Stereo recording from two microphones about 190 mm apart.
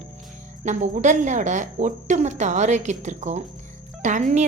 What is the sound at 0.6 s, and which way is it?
Speech, 40° right (ahead or behind).